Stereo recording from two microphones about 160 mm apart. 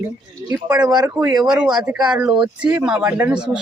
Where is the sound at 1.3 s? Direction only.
5° right (ahead or behind).